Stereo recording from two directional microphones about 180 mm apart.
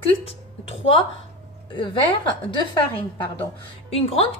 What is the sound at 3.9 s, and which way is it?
Speech, 35° left (ahead or behind).